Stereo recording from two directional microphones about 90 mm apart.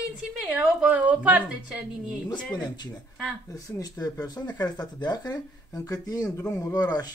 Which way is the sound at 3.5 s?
45° left (ahead or behind).